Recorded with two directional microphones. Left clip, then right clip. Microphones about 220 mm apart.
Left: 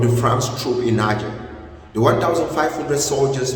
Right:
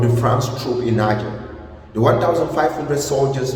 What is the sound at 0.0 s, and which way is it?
A man's voice, 10° left (ahead or behind).